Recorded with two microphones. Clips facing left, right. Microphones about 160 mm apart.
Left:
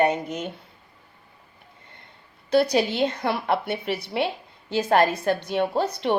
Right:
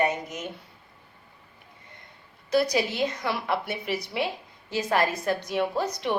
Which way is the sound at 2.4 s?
30° left (ahead or behind).